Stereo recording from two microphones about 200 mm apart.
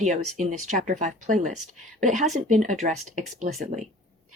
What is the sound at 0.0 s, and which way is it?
Speech, 35° right (ahead or behind).